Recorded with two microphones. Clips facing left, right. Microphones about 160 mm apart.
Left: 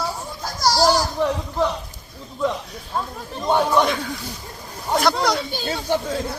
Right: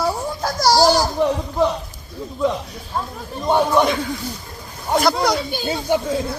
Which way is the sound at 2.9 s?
5° right (ahead or behind).